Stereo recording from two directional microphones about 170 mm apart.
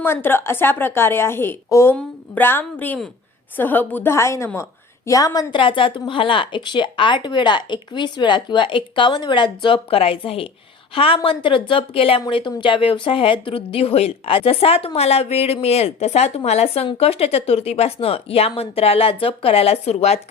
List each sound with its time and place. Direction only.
0.0 s a woman's voice: 15° left (ahead or behind); by 20.1 s 40° left (ahead or behind)